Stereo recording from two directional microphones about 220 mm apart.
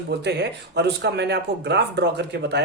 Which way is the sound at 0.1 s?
50° right (ahead or behind).